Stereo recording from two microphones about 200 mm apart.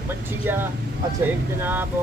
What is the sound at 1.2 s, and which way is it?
Speech, 10° right (ahead or behind).